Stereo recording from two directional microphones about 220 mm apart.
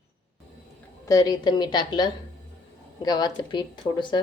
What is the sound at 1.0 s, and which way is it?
A woman's voice, 15° left (ahead or behind).